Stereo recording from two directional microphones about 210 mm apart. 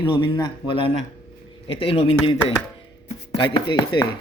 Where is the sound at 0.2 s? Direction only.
20° left (ahead or behind).